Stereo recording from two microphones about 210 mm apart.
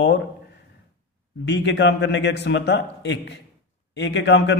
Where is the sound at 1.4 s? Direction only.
55° left (ahead or behind).